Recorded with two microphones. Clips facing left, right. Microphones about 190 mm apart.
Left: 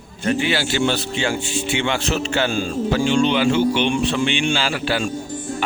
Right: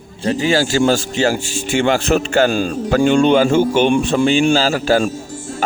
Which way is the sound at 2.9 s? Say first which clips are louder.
Right 6 dB; 55° right (ahead or behind).